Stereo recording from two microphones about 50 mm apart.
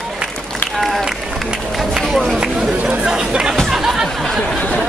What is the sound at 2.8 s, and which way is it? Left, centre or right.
Chatter, right.